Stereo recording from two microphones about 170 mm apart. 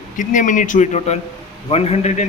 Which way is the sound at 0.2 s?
50° left (ahead or behind).